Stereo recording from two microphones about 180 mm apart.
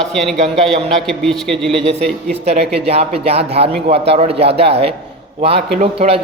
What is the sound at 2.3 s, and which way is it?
A man's voice, 35° right (ahead or behind).